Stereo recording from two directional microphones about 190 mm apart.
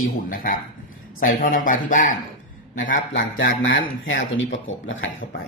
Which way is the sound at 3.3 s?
85° left.